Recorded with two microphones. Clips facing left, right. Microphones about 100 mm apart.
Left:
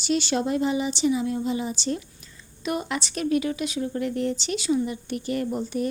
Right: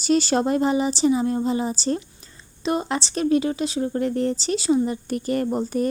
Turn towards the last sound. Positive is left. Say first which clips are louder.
# right 4 dB
turn(degrees=-40)  # may be behind; listen again after turning